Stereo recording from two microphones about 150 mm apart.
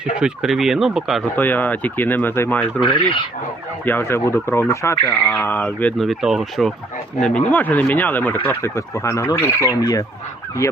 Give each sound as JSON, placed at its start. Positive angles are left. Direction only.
{"t": 0.0, "sound": "speech", "side_deg": -5}
{"t": 1.4, "sound": "speech", "side_deg": 10}
{"t": 3.8, "sound": "speech", "side_deg": 15}
{"t": 6.1, "sound": "speech", "side_deg": 0}
{"t": 8.4, "sound": "fowl", "side_deg": 20}